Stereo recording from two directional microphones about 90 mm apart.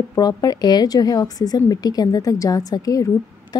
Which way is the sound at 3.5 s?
45° left (ahead or behind).